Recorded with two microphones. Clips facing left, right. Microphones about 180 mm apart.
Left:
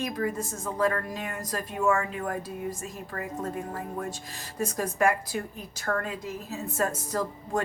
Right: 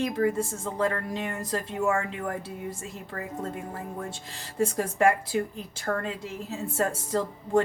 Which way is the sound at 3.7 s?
25° right (ahead or behind).